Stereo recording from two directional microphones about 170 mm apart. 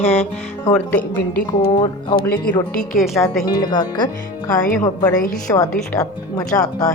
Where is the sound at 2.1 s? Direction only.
60° left (ahead or behind).